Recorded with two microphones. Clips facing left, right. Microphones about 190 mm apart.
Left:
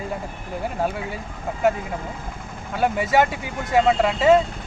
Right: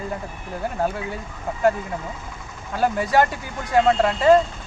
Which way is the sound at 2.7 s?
5° left (ahead or behind).